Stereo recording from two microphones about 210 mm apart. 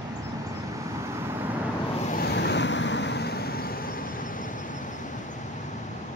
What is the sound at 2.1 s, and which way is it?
Vehicle, 50° left (ahead or behind).